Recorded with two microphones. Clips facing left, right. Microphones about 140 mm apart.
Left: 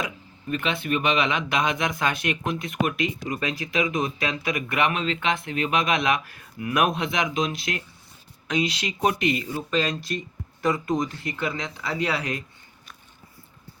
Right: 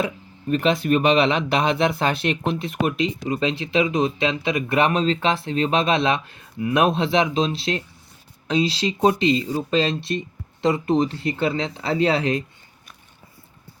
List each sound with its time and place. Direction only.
0.0 s speech: 35° right (ahead or behind)